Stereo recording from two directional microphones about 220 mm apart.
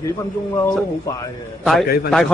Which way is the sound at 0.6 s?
10° left (ahead or behind).